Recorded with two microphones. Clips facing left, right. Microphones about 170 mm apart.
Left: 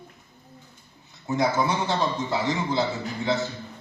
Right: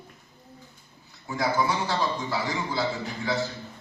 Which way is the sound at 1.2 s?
20° left (ahead or behind).